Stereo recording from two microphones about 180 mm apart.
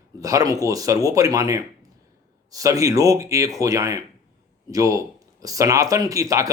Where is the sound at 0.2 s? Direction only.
20° right (ahead or behind).